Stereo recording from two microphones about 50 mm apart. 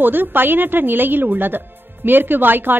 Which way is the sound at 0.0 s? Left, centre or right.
Right.